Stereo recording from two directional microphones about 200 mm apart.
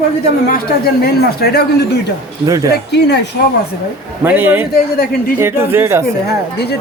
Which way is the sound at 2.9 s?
55° left (ahead or behind).